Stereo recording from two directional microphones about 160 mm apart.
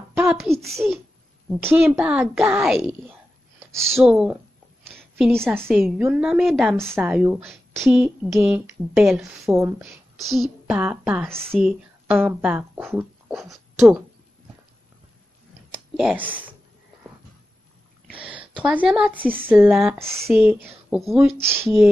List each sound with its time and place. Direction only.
0.1 s a sound: 5° right (ahead or behind)
1.6 s a woman's voice: 10° right (ahead or behind)
2.8 s a sound: 15° right (ahead or behind)
3.9 s a woman's voice: 5° right (ahead or behind)
11.5 s speech: centre (ahead or behind)
13.4 s speech: centre (ahead or behind)
16.0 s a woman's voice: 10° right (ahead or behind)
18.1 s a woman's voice: 10° right (ahead or behind)
21.5 s a woman's voice: 15° right (ahead or behind)